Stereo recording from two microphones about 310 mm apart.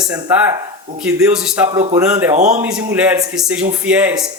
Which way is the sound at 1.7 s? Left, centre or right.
Centre.